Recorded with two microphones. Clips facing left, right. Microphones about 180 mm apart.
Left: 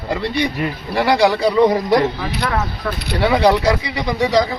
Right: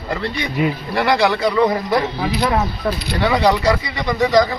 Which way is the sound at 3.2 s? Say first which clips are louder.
Left 2 dB; 10° left (ahead or behind).